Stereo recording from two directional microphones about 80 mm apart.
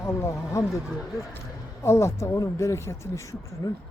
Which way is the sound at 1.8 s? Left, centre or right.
Left.